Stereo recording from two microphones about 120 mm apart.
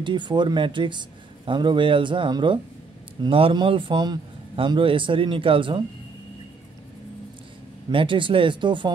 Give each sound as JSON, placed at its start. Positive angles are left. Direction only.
{"t": 0.0, "sound": "a man's voice", "side_deg": -40}
{"t": 7.9, "sound": "a man's voice", "side_deg": -45}